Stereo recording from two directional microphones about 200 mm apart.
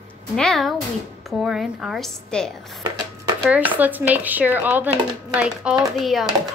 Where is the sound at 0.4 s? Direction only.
Centre (ahead or behind).